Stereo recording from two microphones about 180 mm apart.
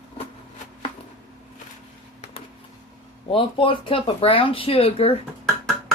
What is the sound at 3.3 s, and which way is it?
Speech, 30° left (ahead or behind).